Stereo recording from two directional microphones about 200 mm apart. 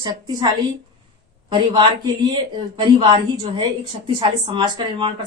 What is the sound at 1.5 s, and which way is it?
A woman's voice, 20° right (ahead or behind).